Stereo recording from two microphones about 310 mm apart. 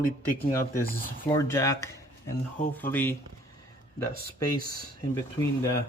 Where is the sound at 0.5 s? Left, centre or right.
Centre.